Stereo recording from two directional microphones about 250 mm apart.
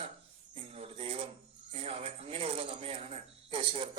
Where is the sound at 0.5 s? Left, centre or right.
Right.